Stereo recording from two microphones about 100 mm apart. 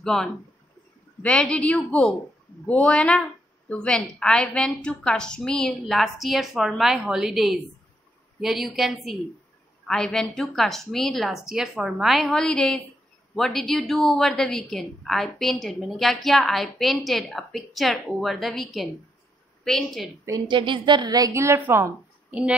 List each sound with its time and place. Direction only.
0.0 s a woman's voice: 5° left (ahead or behind)
20.4 s a woman's voice: 55° right (ahead or behind); by 21.9 s 25° right (ahead or behind)
22.3 s speech: 10° right (ahead or behind)